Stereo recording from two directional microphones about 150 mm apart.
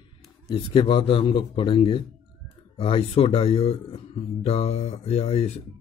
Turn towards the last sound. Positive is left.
turn(degrees=45)  # may be behind; listen again after turning